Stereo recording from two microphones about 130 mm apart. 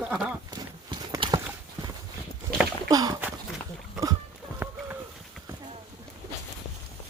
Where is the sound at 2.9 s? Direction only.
30° right (ahead or behind).